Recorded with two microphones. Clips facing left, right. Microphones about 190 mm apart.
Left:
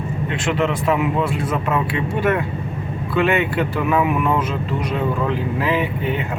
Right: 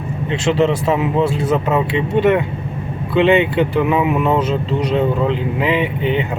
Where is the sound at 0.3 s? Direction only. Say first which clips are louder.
Right 6 dB; 25° right (ahead or behind).